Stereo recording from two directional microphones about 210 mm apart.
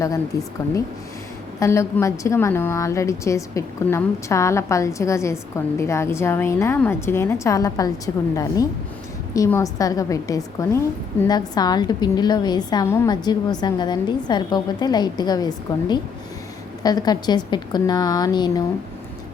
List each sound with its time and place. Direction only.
0.3 s a woman's voice: 15° left (ahead or behind)
1.5 s a woman's voice: 15° left (ahead or behind)